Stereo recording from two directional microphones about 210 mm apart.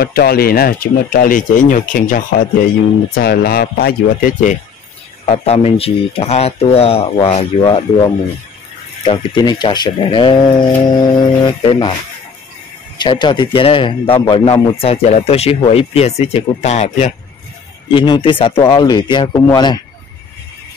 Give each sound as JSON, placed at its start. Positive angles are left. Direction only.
{"t": 0.0, "sound": "speech", "side_deg": 45}
{"t": 5.2, "sound": "speech", "side_deg": 30}
{"t": 12.9, "sound": "speech", "side_deg": 20}
{"t": 17.9, "sound": "speech", "side_deg": 20}